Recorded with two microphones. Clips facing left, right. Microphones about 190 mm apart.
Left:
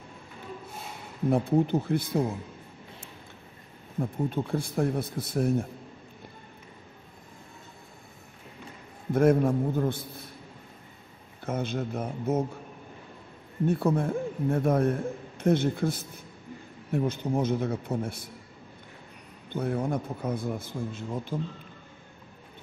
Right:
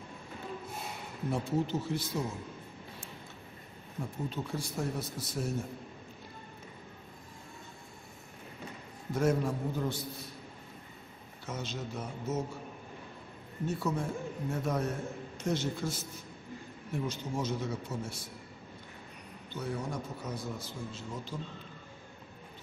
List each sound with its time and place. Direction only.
1.3 s a man's voice: 55° left (ahead or behind)
4.0 s a man's voice: 55° left (ahead or behind)
9.1 s a man's voice: 55° left (ahead or behind)
11.4 s a man's voice: 55° left (ahead or behind)
13.7 s a man's voice: 55° left (ahead or behind)
19.5 s a man's voice: 55° left (ahead or behind)